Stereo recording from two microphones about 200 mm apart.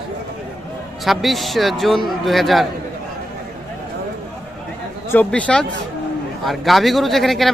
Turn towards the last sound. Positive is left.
turn(degrees=0)  # may be behind; listen again after turning